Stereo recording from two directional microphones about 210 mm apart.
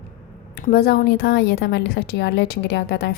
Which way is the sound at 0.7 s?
50° left (ahead or behind).